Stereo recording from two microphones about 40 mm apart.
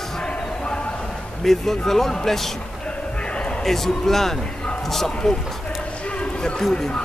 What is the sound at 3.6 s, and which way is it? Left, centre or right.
A man's voice, centre.